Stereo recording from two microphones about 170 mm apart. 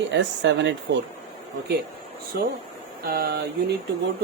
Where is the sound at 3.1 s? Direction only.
65° right (ahead or behind).